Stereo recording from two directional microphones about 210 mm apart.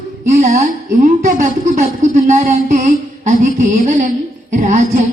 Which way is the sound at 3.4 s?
35° right (ahead or behind).